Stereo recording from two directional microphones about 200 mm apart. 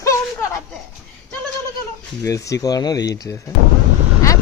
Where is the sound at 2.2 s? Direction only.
15° left (ahead or behind).